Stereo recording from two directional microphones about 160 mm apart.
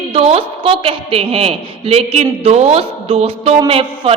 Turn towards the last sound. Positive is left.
turn(degrees=-35)  # may be behind; listen again after turning